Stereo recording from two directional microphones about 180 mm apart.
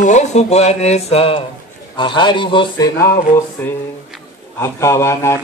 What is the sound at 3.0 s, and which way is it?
Speech, 15° left (ahead or behind).